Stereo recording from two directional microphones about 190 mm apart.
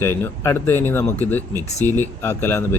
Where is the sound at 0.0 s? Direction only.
10° left (ahead or behind).